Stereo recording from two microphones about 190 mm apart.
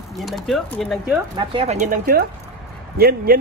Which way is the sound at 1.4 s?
30° right (ahead or behind).